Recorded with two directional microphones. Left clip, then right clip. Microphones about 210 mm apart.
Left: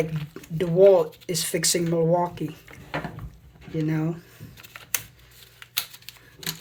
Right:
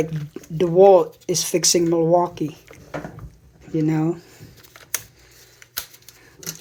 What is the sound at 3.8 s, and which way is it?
Speech, 30° right (ahead or behind).